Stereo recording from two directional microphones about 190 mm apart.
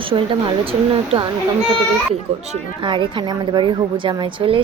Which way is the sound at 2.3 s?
35° right (ahead or behind).